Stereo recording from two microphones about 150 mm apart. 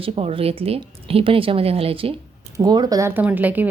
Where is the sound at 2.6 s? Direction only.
25° right (ahead or behind); by 3.7 s 10° right (ahead or behind).